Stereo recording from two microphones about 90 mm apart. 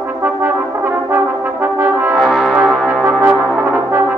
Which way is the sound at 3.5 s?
25° right (ahead or behind).